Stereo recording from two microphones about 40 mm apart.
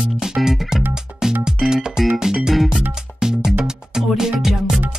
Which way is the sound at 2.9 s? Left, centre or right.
Centre.